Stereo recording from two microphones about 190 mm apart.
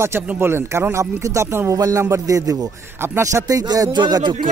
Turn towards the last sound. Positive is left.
turn(degrees=-20)  # may be behind; listen again after turning